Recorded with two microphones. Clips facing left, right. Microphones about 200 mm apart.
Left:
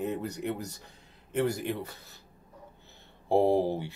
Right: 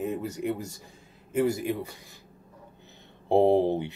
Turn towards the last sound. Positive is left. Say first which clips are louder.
# right 4 dB
turn(degrees=-20)  # may be behind; listen again after turning